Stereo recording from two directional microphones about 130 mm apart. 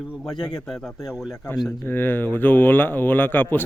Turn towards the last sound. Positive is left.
turn(degrees=15)  # may be behind; listen again after turning